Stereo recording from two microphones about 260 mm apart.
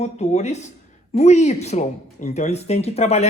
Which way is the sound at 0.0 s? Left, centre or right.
Left.